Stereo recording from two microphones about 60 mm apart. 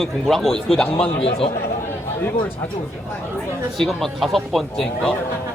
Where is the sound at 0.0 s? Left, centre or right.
Centre.